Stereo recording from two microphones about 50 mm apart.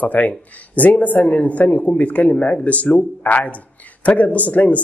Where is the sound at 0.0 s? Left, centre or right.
Left.